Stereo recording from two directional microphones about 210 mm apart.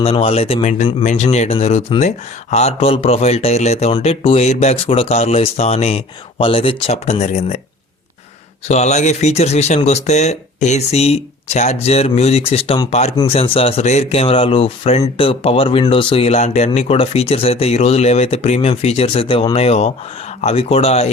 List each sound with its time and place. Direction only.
0.0 s speech: 25° left (ahead or behind)
8.6 s speech: 30° left (ahead or behind)